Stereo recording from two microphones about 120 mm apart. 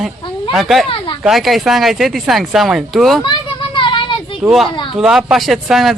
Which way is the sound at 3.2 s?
40° left (ahead or behind).